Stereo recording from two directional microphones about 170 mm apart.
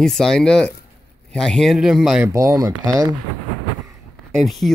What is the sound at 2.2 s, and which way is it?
Speech, 20° right (ahead or behind).